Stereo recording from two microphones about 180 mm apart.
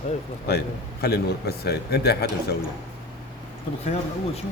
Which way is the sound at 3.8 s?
35° left (ahead or behind).